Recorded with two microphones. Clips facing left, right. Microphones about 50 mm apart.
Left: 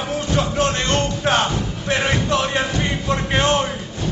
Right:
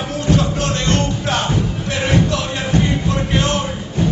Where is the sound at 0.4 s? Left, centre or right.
Left.